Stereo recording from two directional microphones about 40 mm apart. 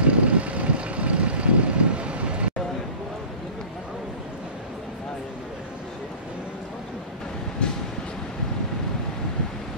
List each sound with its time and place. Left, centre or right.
0.0 s vehicle: right
7.6 s vehicle: left